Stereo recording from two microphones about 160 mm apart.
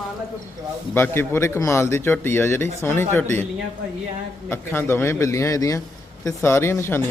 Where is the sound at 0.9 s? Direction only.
15° left (ahead or behind).